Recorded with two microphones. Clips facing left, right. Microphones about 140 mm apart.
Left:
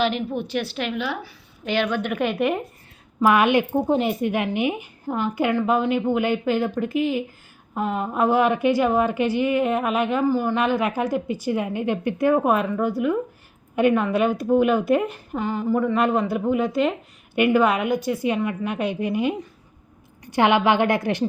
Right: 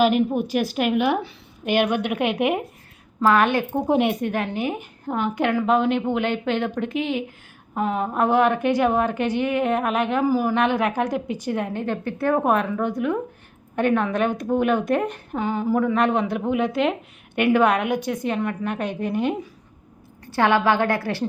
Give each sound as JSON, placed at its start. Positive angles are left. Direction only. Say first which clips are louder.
{"t": 0.3, "sound": "a woman's voice", "louder": "right 3 dB", "side_deg": -10}
{"t": 2.1, "sound": "a woman's voice", "louder": "left 1 dB", "side_deg": -15}
{"t": 3.2, "sound": "a woman's voice", "louder": "left 1 dB", "side_deg": 15}
{"t": 3.8, "sound": "a woman's voice", "louder": "right 1 dB", "side_deg": 0}
{"t": 4.3, "sound": "a woman's voice", "louder": "left 2 dB", "side_deg": 10}
{"t": 12.3, "sound": "a woman's voice", "louder": "right 1 dB", "side_deg": 5}